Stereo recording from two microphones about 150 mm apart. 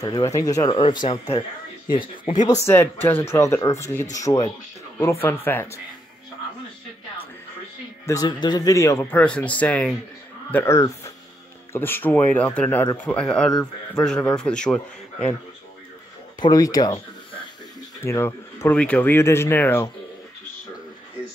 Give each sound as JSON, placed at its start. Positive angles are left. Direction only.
{"t": 0.0, "sound": "speech", "side_deg": 25}
{"t": 2.4, "sound": "speech", "side_deg": 20}
{"t": 8.1, "sound": "speech", "side_deg": 25}
{"t": 16.3, "sound": "speech", "side_deg": 25}